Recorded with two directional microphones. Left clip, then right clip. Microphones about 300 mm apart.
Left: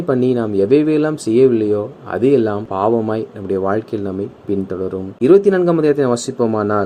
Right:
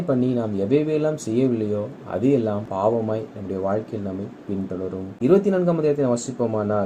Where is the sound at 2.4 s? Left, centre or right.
Left.